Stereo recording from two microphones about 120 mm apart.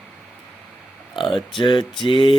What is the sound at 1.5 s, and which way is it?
Mantra, 45° left (ahead or behind).